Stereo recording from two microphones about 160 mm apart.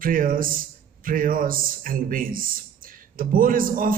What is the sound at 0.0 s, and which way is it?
A man's voice, 60° right (ahead or behind).